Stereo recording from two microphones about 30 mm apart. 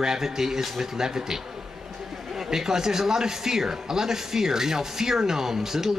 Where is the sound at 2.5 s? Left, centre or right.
Centre.